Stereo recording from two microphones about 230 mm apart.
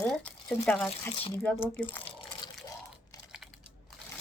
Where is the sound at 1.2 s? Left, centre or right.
Centre.